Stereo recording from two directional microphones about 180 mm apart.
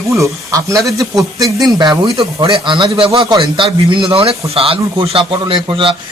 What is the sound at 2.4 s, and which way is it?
A man's voice, 30° right (ahead or behind).